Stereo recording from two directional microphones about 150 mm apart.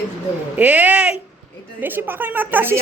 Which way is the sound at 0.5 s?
10° right (ahead or behind).